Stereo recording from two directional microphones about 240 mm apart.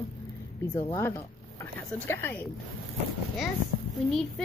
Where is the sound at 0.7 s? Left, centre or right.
Centre.